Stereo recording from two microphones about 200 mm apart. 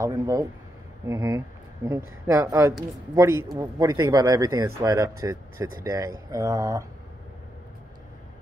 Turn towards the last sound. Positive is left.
turn(degrees=-15)  # may be behind; listen again after turning